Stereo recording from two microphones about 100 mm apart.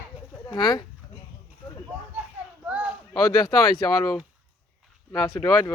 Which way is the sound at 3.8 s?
35° left (ahead or behind).